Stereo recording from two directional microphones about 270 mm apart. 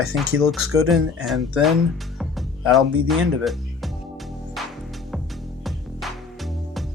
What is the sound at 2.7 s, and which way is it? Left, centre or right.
Speech, centre.